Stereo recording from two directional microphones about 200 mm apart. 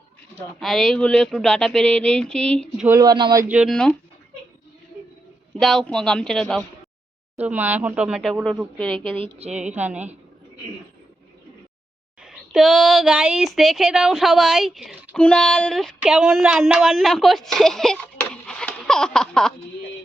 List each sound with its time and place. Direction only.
0.6 s speech: centre (ahead or behind)
2.8 s speech: 15° right (ahead or behind)
3.5 s speech: centre (ahead or behind)
5.5 s speech: centre (ahead or behind)
9.1 s a woman's voice: 30° right (ahead or behind)
9.7 s speech: 5° right (ahead or behind)
12.2 s speech: centre (ahead or behind)